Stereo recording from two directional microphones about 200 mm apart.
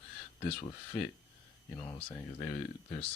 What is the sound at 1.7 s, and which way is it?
Speech, 20° left (ahead or behind).